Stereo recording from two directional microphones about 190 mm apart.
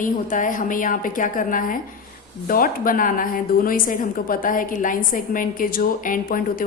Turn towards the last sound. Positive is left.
turn(degrees=50)  # may be behind; listen again after turning